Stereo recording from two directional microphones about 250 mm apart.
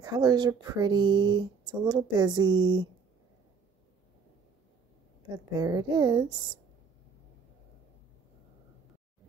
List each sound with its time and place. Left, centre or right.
0.0 s speech: centre
5.6 s speech: centre